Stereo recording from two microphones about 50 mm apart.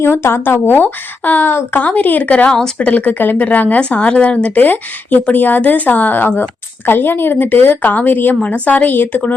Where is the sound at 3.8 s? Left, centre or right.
Left.